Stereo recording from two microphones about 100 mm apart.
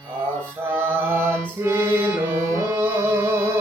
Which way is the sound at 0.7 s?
20° right (ahead or behind).